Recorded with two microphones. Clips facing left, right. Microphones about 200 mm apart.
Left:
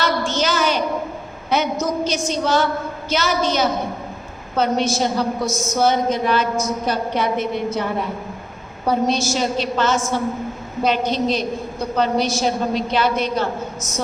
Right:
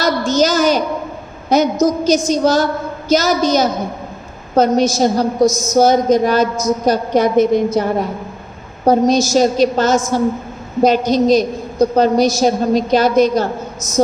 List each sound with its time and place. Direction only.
0.3 s a woman's voice: 40° right (ahead or behind)